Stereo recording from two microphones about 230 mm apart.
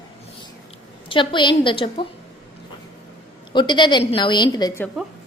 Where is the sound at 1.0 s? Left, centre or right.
Left.